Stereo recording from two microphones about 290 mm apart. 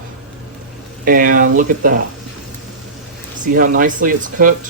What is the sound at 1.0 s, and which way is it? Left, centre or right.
Speech, right.